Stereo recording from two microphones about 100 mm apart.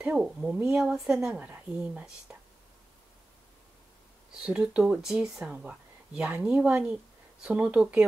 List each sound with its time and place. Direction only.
0.0 s speech: 10° right (ahead or behind)
4.4 s speech: 10° right (ahead or behind)